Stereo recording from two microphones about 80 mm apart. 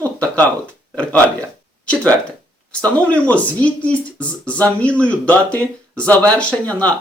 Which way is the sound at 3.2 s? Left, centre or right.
Centre.